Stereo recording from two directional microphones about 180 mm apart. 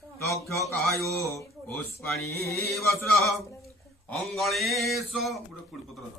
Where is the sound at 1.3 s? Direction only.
15° left (ahead or behind).